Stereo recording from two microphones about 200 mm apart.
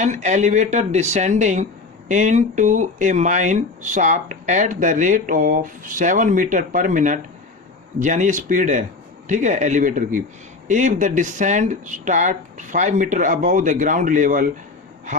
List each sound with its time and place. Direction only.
0.0 s speech: 35° right (ahead or behind)